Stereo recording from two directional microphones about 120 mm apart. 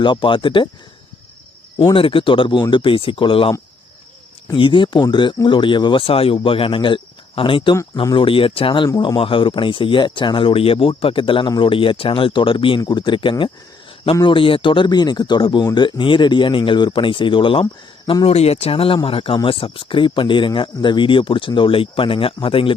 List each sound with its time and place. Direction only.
0.0 s speech: 45° left (ahead or behind)
1.8 s speech: 45° left (ahead or behind)
4.5 s speech: 45° left (ahead or behind)